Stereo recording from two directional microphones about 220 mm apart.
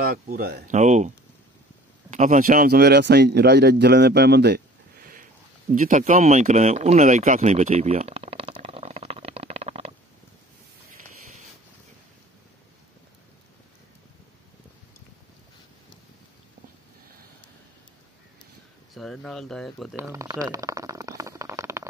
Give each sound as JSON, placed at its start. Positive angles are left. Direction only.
{"t": 0.0, "sound": "speech", "side_deg": -40}
{"t": 5.7, "sound": "a sound", "side_deg": -35}
{"t": 18.9, "sound": "speech", "side_deg": 0}
{"t": 20.0, "sound": "stomach rumble", "side_deg": -15}